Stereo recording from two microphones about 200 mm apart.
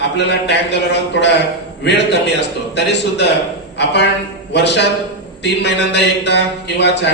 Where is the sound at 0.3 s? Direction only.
60° left (ahead or behind).